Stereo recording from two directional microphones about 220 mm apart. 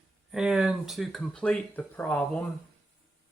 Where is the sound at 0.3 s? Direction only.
Centre (ahead or behind).